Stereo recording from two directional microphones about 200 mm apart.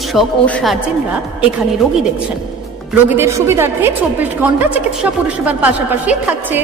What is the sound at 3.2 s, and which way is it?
A woman's voice, 15° right (ahead or behind).